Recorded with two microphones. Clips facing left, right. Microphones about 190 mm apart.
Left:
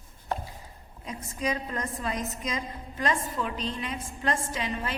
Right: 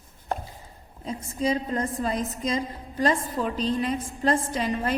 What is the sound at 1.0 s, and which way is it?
A woman's voice, 30° right (ahead or behind).